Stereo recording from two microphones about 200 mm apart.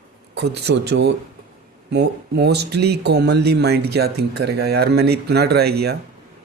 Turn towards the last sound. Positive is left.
turn(degrees=-55)  # may be behind; listen again after turning